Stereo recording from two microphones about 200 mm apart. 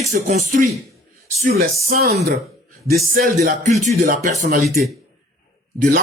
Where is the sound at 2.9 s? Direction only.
45° right (ahead or behind).